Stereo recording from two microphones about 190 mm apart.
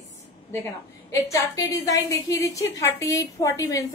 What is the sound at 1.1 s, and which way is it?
A woman's voice, 15° left (ahead or behind).